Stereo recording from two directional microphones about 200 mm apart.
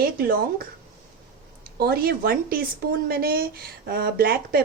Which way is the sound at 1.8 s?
50° right (ahead or behind).